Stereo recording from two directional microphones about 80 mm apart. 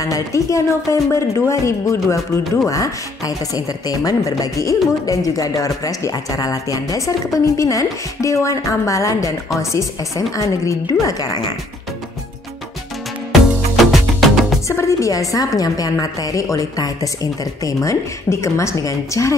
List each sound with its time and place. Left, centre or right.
0.0 s a woman's voice: left
13.9 s music: centre
14.7 s a woman's voice: left